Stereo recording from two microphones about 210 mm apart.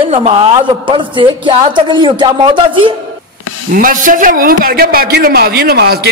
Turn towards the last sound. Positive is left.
turn(degrees=-50)  # may be behind; listen again after turning